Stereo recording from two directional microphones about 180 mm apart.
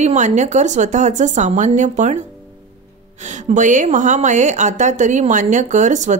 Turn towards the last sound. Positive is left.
turn(degrees=-40)  # may be behind; listen again after turning